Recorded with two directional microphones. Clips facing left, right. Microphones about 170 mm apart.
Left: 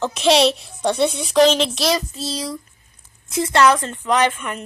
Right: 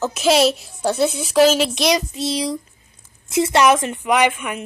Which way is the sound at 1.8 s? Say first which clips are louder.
Right 2 dB; 15° right (ahead or behind).